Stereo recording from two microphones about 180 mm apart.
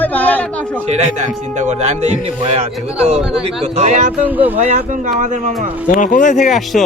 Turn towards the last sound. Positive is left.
turn(degrees=0)  # may be behind; listen again after turning